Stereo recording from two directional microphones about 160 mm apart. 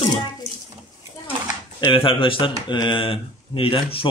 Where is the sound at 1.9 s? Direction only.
35° left (ahead or behind).